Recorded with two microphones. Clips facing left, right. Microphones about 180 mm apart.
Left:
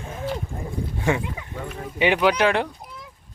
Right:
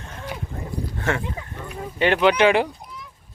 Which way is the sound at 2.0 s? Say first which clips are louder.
Right 2 dB; 5° left (ahead or behind).